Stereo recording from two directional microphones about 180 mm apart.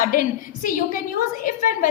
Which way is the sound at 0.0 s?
50° left (ahead or behind).